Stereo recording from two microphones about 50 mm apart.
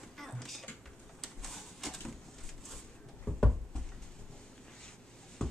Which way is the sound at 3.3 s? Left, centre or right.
Centre.